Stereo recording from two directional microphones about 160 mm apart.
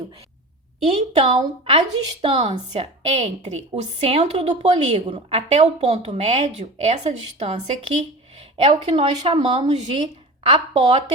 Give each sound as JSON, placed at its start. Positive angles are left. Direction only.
{"t": 0.9, "sound": "a woman's voice", "side_deg": -40}